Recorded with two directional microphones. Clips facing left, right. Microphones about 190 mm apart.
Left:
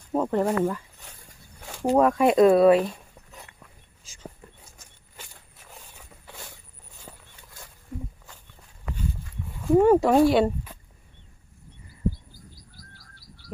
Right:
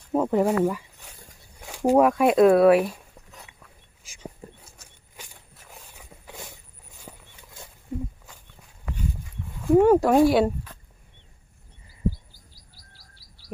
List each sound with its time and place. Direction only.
0.1 s a sound: 5° right (ahead or behind)
4.0 s a sound: 10° right (ahead or behind)
5.1 s walk: 10° right (ahead or behind)
7.0 s horse: 10° right (ahead or behind)
9.5 s speech: centre (ahead or behind)
12.7 s bird: 55° left (ahead or behind)